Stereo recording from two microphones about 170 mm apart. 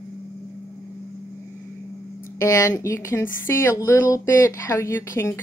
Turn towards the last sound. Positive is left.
turn(degrees=15)  # may be behind; listen again after turning